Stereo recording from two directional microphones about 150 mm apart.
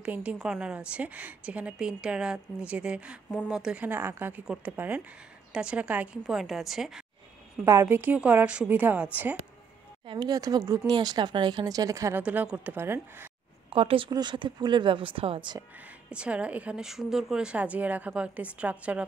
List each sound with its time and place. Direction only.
0.0 s a woman's voice: 10° right (ahead or behind)
7.6 s a woman's voice: 15° right (ahead or behind)
10.0 s speech: 25° right (ahead or behind)
12.2 s a woman's voice: 10° right (ahead or behind)
13.7 s speech: 35° right (ahead or behind)
16.1 s a woman's voice: 10° right (ahead or behind)